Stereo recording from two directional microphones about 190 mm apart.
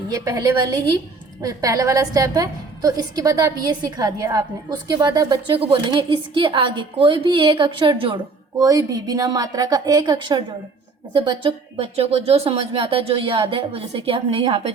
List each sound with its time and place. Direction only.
0.1 s a woman's voice: 15° right (ahead or behind)